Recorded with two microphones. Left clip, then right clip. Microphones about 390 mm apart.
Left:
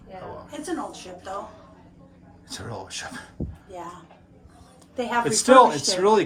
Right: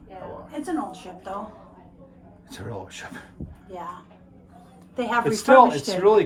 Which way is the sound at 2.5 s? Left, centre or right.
Centre.